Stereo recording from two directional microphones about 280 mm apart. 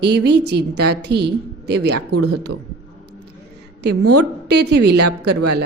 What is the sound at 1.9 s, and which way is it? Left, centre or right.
Speech, right.